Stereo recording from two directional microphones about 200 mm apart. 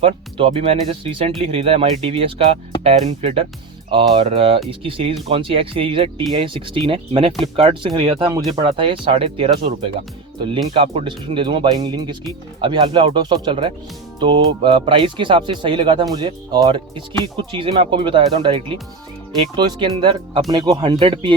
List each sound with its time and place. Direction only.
0.0 s speech: 25° right (ahead or behind)
10.8 s speech: 25° right (ahead or behind)